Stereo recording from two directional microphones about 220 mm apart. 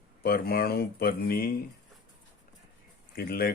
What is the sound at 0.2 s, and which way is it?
Speech, 40° left (ahead or behind).